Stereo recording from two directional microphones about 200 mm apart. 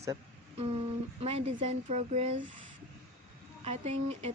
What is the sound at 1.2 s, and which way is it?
Speech, 30° right (ahead or behind).